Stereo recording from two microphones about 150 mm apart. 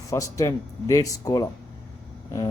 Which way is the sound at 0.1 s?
20° left (ahead or behind).